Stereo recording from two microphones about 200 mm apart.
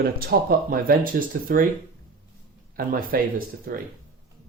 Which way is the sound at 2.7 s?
45° right (ahead or behind).